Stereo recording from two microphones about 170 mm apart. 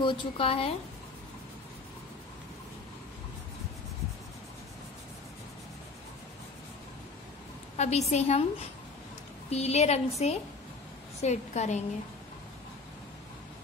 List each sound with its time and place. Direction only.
0.0 s a woman's voice: 35° left (ahead or behind)
7.7 s a woman's voice: 40° left (ahead or behind)
9.5 s a woman's voice: 40° left (ahead or behind)